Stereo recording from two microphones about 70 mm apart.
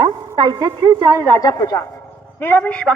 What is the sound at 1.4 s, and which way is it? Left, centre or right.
Speech, left.